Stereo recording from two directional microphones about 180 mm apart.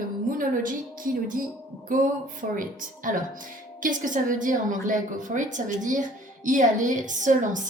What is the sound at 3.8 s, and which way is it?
A woman's voice, 45° right (ahead or behind).